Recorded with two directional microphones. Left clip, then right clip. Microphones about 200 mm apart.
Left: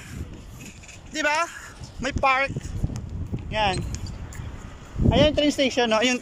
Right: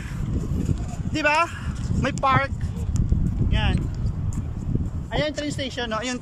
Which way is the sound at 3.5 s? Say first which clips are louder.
Left 6 dB; 20° left (ahead or behind).